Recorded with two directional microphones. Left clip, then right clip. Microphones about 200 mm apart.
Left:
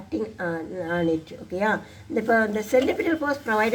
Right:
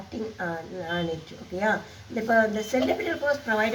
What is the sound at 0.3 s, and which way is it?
Speech, 30° left (ahead or behind).